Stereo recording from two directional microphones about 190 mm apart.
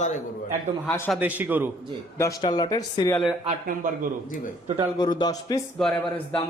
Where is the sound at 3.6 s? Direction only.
45° right (ahead or behind).